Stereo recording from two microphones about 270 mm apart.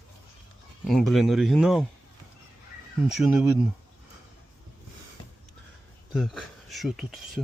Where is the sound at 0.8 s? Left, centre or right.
Centre.